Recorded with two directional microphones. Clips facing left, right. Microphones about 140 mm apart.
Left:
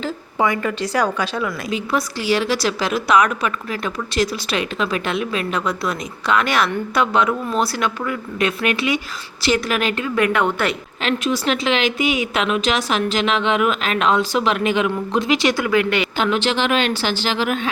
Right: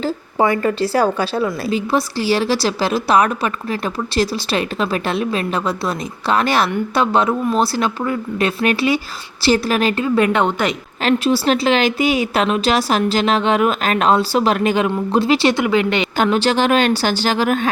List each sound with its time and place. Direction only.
0.0 s a woman's voice: 35° right (ahead or behind); by 10.8 s 20° right (ahead or behind)
11.0 s a woman's voice: 30° right (ahead or behind)
16.1 s a woman's voice: 40° right (ahead or behind)